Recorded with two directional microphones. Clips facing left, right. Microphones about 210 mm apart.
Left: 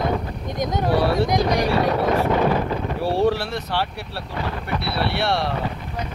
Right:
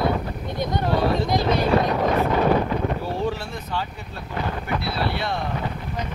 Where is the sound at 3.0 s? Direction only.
75° left (ahead or behind).